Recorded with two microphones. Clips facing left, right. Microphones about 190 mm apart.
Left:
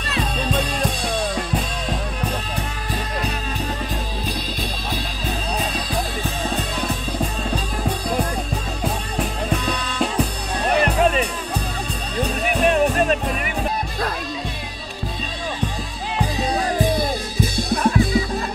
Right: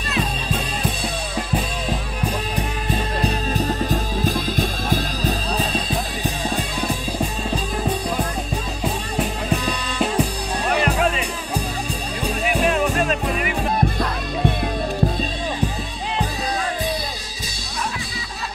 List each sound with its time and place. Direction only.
3.2 s music: 30° right (ahead or behind)
3.9 s music: 45° right (ahead or behind)
5.6 s music: 30° right (ahead or behind)
9.1 s music: 5° right (ahead or behind)
16.7 s music: 50° left (ahead or behind)